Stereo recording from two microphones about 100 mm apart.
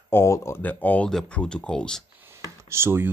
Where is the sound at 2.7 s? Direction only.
25° right (ahead or behind).